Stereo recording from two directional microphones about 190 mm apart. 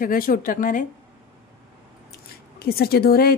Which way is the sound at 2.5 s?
55° left (ahead or behind).